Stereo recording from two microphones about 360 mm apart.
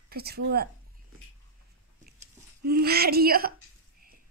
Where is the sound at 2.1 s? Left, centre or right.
Right.